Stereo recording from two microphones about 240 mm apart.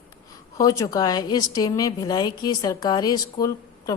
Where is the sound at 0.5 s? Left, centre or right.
Centre.